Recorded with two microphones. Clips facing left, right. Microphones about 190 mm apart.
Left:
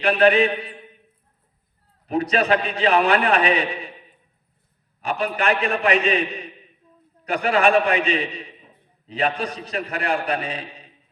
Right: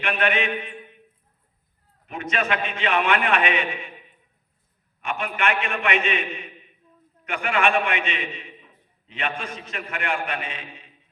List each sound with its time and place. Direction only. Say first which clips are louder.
0.0 s mantra: left 8 dB; 35° left (ahead or behind)
2.0 s a man's voice: left 7 dB; 35° left (ahead or behind)
4.9 s a man's voice: left 4 dB; 35° left (ahead or behind)